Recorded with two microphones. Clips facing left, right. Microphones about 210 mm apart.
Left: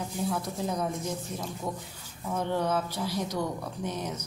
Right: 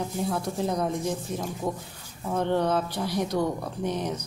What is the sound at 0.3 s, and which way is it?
Speech, 30° right (ahead or behind).